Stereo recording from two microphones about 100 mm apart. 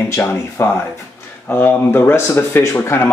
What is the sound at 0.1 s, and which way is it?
Speech, 25° left (ahead or behind).